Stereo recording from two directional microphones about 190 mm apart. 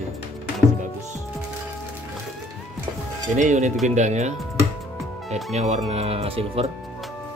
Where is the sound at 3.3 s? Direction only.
40° right (ahead or behind).